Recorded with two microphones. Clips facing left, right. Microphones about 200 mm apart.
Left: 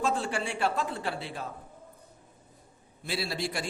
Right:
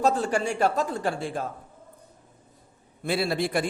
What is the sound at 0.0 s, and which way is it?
A man's voice, 40° right (ahead or behind).